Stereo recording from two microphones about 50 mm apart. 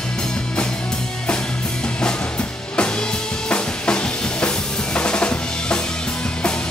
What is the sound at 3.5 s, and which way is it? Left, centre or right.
Drum, left.